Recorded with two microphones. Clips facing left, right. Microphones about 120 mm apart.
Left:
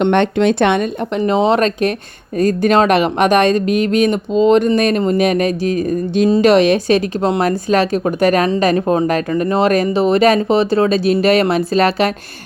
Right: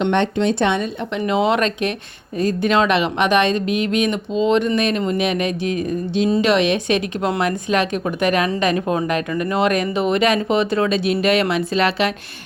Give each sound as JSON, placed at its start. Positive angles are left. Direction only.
{"t": 0.0, "sound": "speech", "side_deg": 60}
{"t": 1.2, "sound": "speech", "side_deg": 30}